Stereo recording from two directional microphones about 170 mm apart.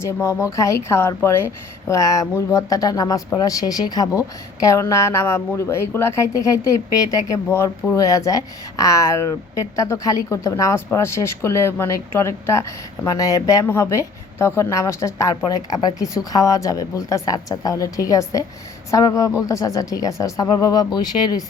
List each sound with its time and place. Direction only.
0.2 s a woman's voice: 15° left (ahead or behind)